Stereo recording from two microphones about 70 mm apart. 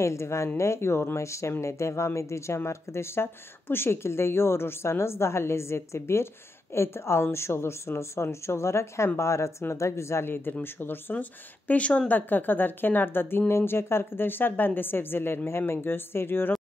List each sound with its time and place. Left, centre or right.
0.0 s speech: left